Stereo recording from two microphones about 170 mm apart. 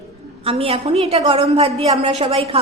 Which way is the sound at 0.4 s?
35° right (ahead or behind).